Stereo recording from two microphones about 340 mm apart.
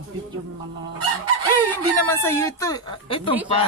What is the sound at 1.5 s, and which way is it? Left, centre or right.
Speech, centre.